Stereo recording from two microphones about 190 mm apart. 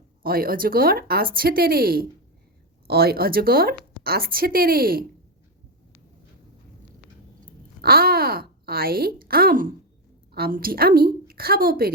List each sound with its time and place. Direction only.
0.2 s a woman's voice: 50° right (ahead or behind)
7.8 s a woman's voice: 50° right (ahead or behind)